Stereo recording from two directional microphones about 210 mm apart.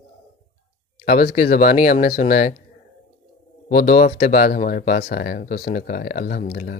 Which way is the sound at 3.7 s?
40° left (ahead or behind).